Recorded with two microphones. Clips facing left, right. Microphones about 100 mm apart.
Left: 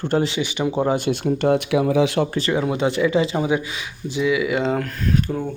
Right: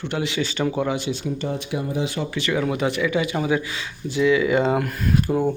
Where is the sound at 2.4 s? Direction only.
35° left (ahead or behind); by 5.4 s 10° right (ahead or behind).